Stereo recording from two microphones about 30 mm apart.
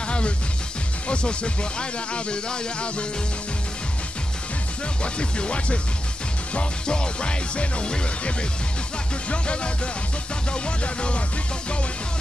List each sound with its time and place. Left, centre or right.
1.0 s speech: left
5.0 s speech: left
6.9 s speech: left
9.3 s speech: left